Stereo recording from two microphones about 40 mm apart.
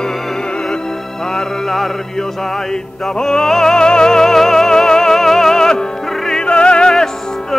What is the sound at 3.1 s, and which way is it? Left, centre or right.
Music, centre.